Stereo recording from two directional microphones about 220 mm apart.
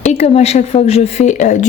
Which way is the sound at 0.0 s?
30° left (ahead or behind).